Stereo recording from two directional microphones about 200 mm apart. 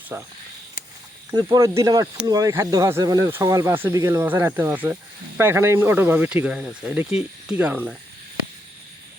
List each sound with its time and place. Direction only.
0.1 s speech: 10° right (ahead or behind)
1.3 s speech: 15° right (ahead or behind)